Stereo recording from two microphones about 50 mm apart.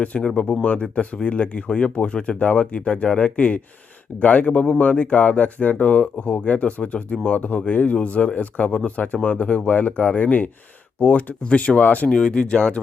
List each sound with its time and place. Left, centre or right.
0.0 s speech: left
12.0 s speech: centre